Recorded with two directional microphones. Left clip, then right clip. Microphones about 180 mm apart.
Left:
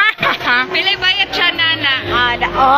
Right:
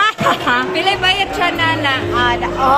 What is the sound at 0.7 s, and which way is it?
Music, 35° right (ahead or behind).